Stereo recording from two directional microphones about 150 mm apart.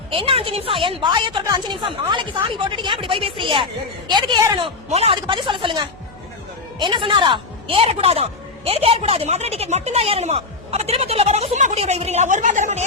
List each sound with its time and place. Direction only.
0.1 s a woman's voice: 40° right (ahead or behind)
4.9 s a man's voice: 45° right (ahead or behind)
5.1 s a woman's voice: 30° right (ahead or behind); by 12.8 s 55° right (ahead or behind)